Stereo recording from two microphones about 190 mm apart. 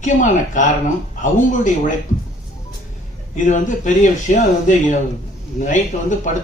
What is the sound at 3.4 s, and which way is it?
Speech, 40° left (ahead or behind).